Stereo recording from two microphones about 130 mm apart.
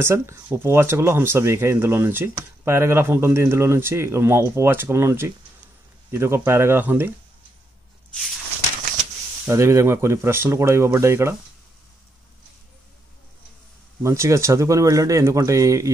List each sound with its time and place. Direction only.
0.0 s speech: 20° right (ahead or behind)
9.5 s speech: 20° right (ahead or behind)
14.0 s speech: 20° right (ahead or behind)